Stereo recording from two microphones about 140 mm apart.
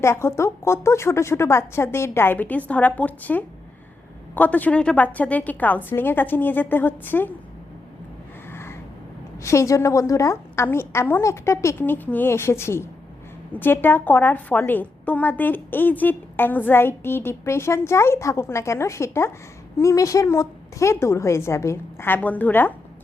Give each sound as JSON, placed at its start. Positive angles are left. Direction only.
{"t": 0.0, "sound": "a woman's voice", "side_deg": 20}
{"t": 9.4, "sound": "a woman's voice", "side_deg": 20}